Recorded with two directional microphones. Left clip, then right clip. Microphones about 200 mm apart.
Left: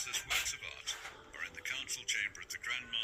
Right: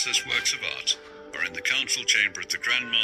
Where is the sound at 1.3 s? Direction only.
40° right (ahead or behind).